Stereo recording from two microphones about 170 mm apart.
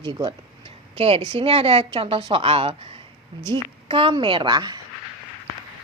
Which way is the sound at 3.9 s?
30° right (ahead or behind).